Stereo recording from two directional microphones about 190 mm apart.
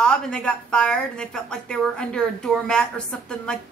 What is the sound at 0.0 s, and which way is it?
A woman's voice, 5° left (ahead or behind).